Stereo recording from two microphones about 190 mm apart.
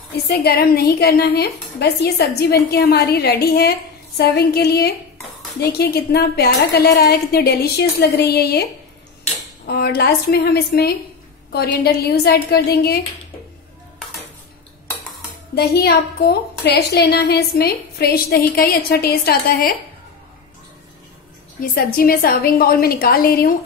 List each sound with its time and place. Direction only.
0.3 s a woman's voice: 55° left (ahead or behind)
9.7 s a woman's voice: 55° left (ahead or behind)
15.5 s a woman's voice: 60° left (ahead or behind)
21.5 s a woman's voice: 50° left (ahead or behind)